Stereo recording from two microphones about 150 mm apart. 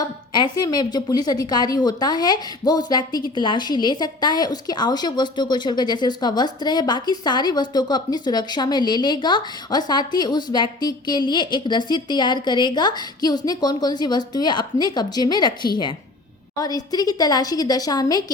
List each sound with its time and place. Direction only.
0.3 s a woman's voice: 30° left (ahead or behind)